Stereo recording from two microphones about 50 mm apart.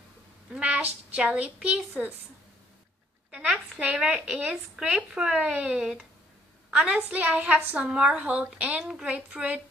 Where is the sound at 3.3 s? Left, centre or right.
Right.